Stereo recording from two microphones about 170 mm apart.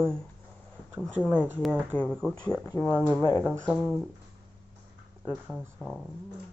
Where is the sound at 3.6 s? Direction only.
Centre (ahead or behind).